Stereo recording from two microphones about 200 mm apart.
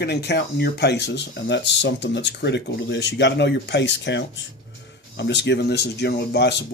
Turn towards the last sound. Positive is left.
turn(degrees=60)  # may be behind; listen again after turning